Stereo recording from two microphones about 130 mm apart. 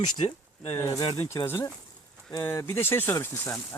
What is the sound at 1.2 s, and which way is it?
Speech, 20° left (ahead or behind).